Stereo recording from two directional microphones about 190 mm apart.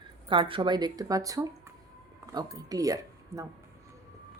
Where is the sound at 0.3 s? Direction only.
25° right (ahead or behind).